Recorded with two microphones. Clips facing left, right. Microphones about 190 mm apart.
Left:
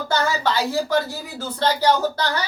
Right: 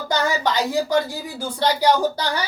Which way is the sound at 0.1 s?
15° right (ahead or behind).